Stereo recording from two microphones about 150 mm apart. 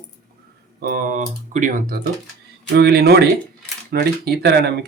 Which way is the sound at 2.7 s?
90° right.